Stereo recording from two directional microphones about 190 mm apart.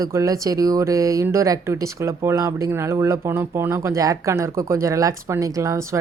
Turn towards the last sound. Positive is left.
turn(degrees=-15)  # may be behind; listen again after turning